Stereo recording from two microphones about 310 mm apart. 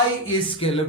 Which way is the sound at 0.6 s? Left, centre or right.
Centre.